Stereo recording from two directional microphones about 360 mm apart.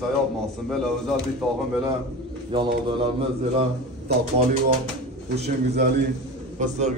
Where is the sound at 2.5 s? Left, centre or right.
Centre.